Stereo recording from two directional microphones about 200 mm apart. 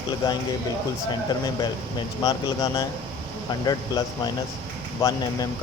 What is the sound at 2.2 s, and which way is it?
Speech, 20° left (ahead or behind).